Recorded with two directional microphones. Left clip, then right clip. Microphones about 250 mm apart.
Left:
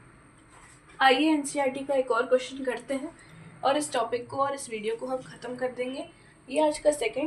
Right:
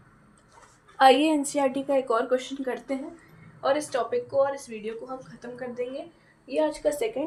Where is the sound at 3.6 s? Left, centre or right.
Right.